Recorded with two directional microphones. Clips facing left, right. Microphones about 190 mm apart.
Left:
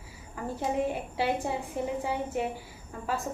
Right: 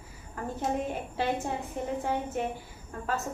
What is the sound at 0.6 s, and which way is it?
Speech, 10° left (ahead or behind).